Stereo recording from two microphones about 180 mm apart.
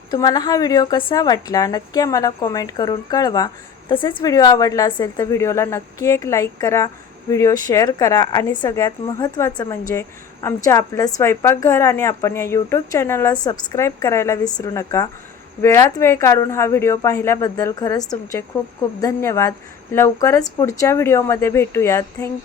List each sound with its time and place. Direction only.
0.1 s a woman's voice: 20° left (ahead or behind)